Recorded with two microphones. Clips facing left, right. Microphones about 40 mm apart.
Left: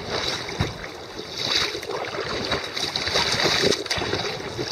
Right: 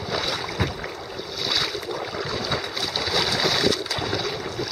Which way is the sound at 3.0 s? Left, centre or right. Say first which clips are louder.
Even; centre.